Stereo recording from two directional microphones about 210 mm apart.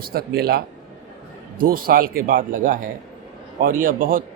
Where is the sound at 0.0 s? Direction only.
45° right (ahead or behind).